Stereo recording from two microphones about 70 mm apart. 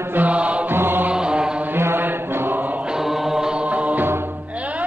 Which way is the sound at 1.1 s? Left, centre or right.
Centre.